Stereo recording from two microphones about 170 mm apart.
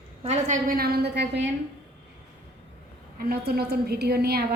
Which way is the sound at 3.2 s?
60° right (ahead or behind).